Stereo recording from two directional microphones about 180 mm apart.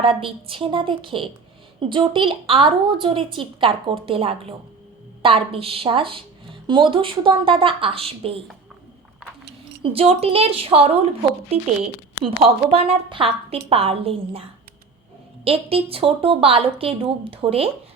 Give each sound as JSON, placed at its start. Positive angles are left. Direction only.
{"t": 0.0, "sound": "speech", "side_deg": -30}
{"t": 9.8, "sound": "a woman's voice", "side_deg": -30}
{"t": 15.4, "sound": "a woman's voice", "side_deg": -30}